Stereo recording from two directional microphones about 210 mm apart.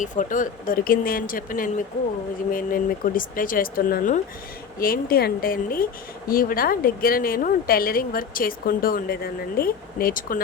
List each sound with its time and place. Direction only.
0.0 s speech: 40° left (ahead or behind)